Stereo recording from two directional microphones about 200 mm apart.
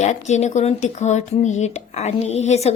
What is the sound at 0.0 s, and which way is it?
Speech, 35° left (ahead or behind).